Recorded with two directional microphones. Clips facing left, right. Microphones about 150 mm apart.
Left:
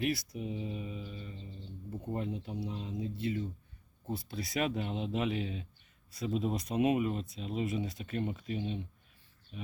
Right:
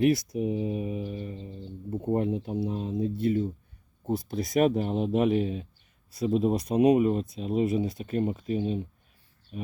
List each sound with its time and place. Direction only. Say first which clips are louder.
0.0 s speech: right 10 dB; 55° right (ahead or behind)